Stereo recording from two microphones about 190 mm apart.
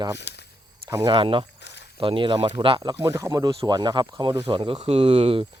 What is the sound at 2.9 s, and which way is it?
Speech, 10° right (ahead or behind).